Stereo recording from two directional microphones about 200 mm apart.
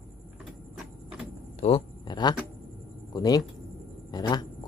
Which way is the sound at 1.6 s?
30° left (ahead or behind).